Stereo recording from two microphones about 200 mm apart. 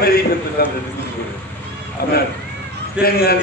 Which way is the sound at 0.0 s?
50° left (ahead or behind).